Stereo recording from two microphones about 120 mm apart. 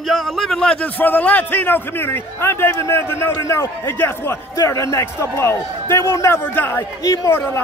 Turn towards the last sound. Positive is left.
turn(degrees=20)  # may be behind; listen again after turning